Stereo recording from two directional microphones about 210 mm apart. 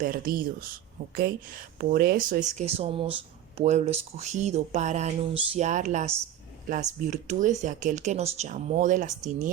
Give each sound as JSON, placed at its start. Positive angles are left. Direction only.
{"t": 0.0, "sound": "speech", "side_deg": -40}
{"t": 1.8, "sound": "speech", "side_deg": -45}